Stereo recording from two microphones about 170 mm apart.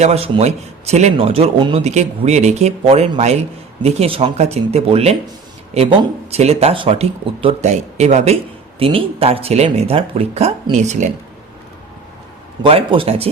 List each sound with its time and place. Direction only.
0.0 s speech: 40° right (ahead or behind)
12.6 s speech: 35° right (ahead or behind)